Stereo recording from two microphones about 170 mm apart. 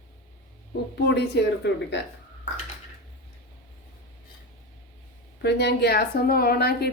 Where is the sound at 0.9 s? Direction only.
85° left.